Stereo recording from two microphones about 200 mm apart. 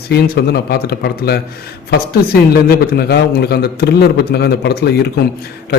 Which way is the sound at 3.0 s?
55° left (ahead or behind).